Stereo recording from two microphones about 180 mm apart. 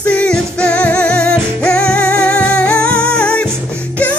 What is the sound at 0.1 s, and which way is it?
Music, 5° left (ahead or behind).